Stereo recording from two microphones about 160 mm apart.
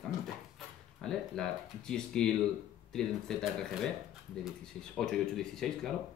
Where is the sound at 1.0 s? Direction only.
5° left (ahead or behind).